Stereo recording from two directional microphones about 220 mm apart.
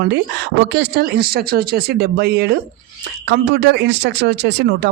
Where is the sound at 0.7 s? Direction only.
50° right (ahead or behind).